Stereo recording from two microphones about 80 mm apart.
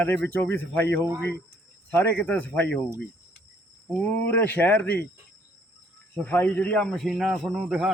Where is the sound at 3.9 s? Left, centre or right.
Left.